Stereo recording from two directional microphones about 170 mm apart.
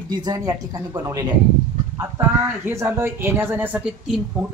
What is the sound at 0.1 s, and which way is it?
Speech, 25° right (ahead or behind).